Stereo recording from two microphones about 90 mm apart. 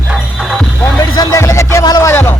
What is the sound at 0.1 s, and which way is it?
Music, 10° right (ahead or behind).